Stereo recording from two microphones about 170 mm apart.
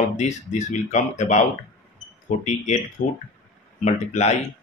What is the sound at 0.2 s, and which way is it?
Speech, 45° left (ahead or behind).